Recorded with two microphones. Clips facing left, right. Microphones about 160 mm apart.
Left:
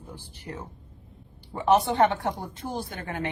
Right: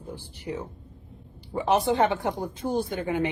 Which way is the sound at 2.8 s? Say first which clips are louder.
Right 7 dB; 15° right (ahead or behind).